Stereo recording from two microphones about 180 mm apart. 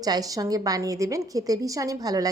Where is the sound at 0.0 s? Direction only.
20° right (ahead or behind).